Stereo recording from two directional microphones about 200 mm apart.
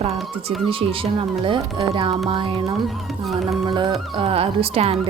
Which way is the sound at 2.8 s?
Centre (ahead or behind).